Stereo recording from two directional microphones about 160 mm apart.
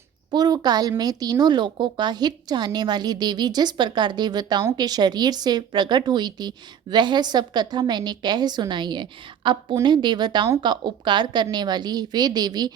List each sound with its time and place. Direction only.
0.3 s a woman's voice: 25° right (ahead or behind)